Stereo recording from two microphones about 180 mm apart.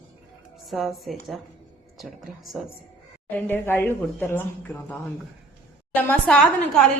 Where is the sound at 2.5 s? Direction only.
5° right (ahead or behind).